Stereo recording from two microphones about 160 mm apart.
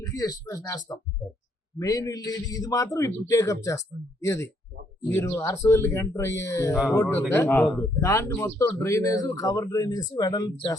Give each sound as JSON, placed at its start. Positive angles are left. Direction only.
{"t": 0.0, "sound": "a man's voice", "side_deg": 20}